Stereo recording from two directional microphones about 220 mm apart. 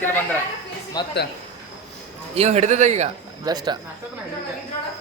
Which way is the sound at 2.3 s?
30° right (ahead or behind).